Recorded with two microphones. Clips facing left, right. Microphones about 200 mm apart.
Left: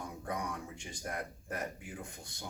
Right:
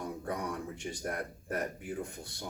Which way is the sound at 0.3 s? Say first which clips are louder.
Right 1 dB; 55° right (ahead or behind).